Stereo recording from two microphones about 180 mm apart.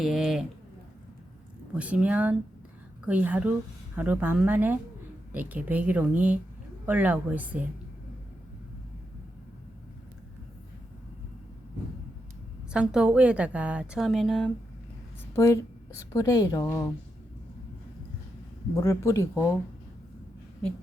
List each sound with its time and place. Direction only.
0.0 s a sound: centre (ahead or behind)
1.7 s speech: 5° right (ahead or behind)
12.7 s a woman's voice: 5° right (ahead or behind)
16.1 s speech: 20° left (ahead or behind)
18.8 s speech: 15° left (ahead or behind)